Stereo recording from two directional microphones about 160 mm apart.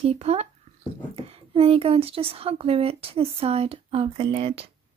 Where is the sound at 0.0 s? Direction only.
40° right (ahead or behind).